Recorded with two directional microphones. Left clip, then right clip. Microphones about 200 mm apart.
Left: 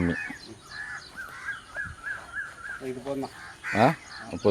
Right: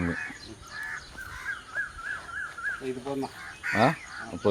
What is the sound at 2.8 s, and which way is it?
Speech, 20° left (ahead or behind).